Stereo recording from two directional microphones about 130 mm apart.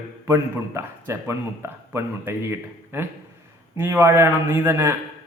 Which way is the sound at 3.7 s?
20° right (ahead or behind).